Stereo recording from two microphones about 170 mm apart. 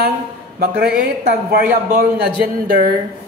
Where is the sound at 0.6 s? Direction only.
60° right (ahead or behind).